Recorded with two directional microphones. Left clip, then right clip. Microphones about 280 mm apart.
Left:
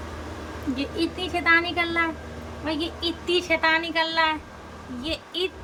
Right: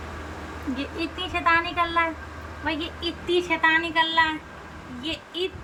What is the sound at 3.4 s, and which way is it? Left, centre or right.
Speech, centre.